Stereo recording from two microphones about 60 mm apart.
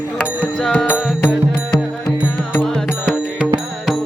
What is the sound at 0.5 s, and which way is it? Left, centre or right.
Music, centre.